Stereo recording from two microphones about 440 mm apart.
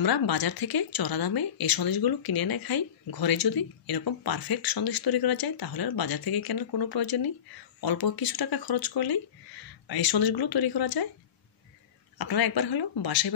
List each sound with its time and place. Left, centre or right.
0.0 s speech: left
12.2 s speech: left